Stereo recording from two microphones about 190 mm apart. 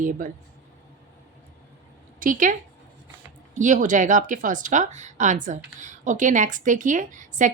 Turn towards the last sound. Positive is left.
turn(degrees=-40)  # may be behind; listen again after turning